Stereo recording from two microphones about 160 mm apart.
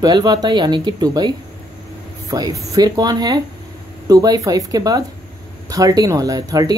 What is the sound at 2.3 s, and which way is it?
Speech, 20° right (ahead or behind).